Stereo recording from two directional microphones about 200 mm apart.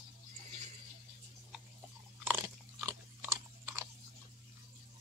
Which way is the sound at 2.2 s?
10° right (ahead or behind).